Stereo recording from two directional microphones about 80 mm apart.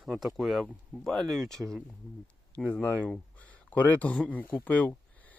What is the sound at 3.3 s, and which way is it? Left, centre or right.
Speech, centre.